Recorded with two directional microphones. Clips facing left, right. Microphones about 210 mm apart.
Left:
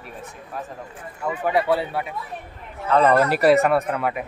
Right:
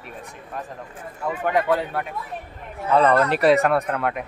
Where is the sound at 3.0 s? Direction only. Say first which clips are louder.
Left 2 dB; 5° left (ahead or behind).